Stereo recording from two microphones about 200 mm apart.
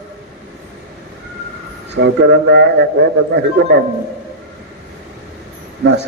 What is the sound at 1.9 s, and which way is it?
A man's voice, 60° right (ahead or behind).